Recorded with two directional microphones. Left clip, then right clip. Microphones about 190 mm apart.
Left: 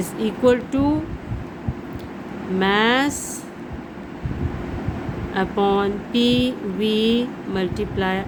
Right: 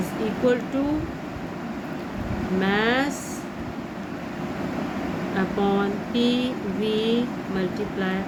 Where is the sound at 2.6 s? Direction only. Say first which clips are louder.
Left 5 dB; 65° left (ahead or behind).